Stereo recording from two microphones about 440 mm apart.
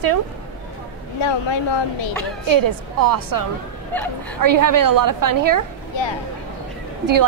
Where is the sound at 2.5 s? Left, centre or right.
Right.